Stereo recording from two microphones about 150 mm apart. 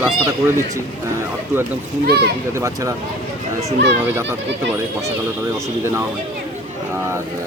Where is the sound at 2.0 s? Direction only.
90° right.